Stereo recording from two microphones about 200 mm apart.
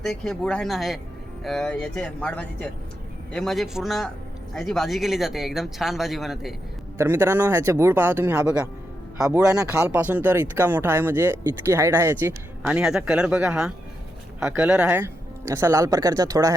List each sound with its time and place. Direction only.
0.0 s speech: centre (ahead or behind)
7.0 s speech: 15° right (ahead or behind)